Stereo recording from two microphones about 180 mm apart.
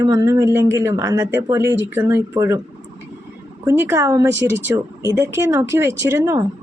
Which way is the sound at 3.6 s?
15° right (ahead or behind).